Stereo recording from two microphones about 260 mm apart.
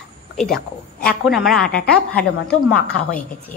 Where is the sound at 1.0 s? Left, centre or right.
Centre.